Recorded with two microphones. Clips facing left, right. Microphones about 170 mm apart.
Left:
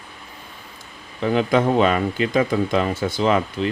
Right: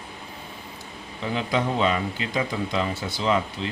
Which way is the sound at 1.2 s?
55° left (ahead or behind).